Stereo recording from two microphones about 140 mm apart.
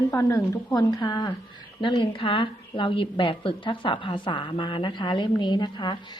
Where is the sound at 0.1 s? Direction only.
20° left (ahead or behind).